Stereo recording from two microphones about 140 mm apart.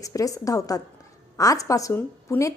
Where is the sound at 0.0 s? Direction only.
25° left (ahead or behind).